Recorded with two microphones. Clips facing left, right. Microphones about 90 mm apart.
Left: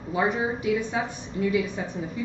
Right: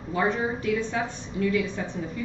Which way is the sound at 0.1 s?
15° left (ahead or behind).